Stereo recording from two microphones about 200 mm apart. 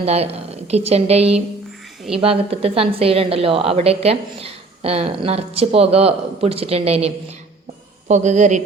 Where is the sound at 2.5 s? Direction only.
30° right (ahead or behind).